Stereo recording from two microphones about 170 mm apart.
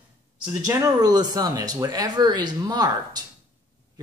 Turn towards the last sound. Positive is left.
turn(degrees=-25)  # may be behind; listen again after turning